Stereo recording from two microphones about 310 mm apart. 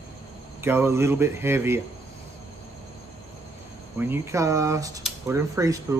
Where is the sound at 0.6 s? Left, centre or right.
Centre.